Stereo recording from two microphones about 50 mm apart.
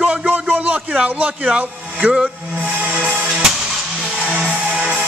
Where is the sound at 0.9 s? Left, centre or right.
Right.